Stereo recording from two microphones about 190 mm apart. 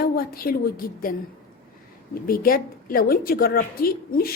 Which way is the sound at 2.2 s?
50° left (ahead or behind).